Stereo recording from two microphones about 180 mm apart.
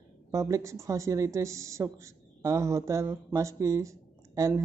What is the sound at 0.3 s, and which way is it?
A man's voice, 15° right (ahead or behind).